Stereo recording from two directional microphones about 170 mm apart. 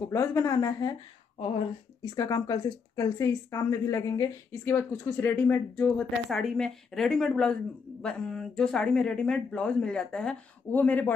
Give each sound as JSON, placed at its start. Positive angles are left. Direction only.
{"t": 0.1, "sound": "speech", "side_deg": 15}
{"t": 2.0, "sound": "speech", "side_deg": 20}